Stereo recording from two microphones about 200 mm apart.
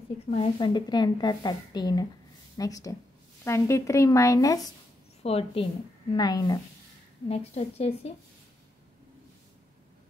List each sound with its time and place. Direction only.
0.3 s speech: 25° left (ahead or behind)
5.2 s speech: 30° left (ahead or behind)
7.2 s a woman's voice: 30° left (ahead or behind)